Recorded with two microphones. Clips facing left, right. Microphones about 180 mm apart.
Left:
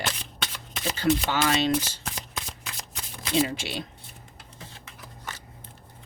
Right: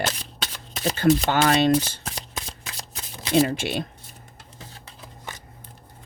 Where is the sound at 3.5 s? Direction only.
50° right (ahead or behind).